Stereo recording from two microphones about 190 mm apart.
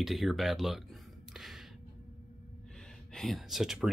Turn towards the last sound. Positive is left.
turn(degrees=0)  # may be behind; listen again after turning